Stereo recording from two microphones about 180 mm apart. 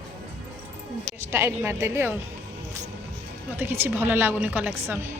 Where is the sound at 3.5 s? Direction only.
10° right (ahead or behind).